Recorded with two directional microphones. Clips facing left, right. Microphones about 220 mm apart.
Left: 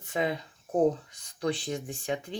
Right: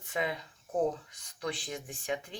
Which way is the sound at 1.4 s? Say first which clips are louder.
Left 7 dB; 30° left (ahead or behind).